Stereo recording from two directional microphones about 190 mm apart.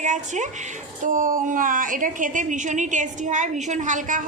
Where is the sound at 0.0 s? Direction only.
40° right (ahead or behind).